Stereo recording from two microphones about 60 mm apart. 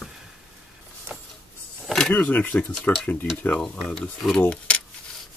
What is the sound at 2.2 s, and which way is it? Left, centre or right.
Speech, left.